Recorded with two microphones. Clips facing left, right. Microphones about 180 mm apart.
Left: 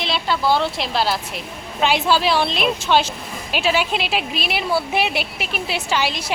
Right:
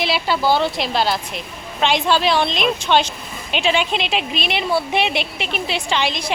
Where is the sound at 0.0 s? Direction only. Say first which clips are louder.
Right 2 dB; 5° right (ahead or behind).